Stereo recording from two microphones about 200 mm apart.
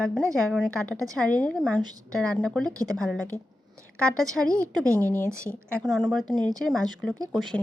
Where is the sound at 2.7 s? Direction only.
15° right (ahead or behind).